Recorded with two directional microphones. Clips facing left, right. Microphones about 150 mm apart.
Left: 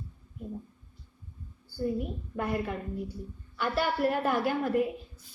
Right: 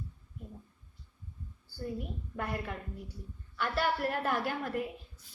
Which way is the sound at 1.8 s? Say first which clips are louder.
Left 7 dB; 5° left (ahead or behind).